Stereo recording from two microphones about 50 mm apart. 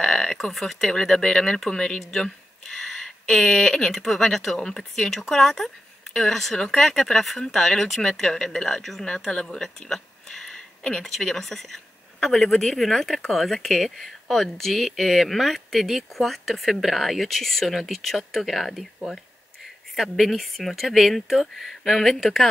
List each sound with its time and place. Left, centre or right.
0.0 s speech: centre
11.1 s speech: centre
20.0 s speech: centre